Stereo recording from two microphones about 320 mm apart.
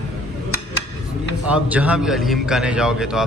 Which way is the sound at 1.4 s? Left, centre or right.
Centre.